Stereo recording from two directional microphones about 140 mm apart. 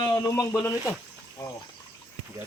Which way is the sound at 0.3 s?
15° left (ahead or behind).